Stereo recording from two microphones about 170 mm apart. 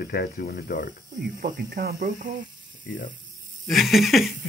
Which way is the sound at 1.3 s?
55° right (ahead or behind).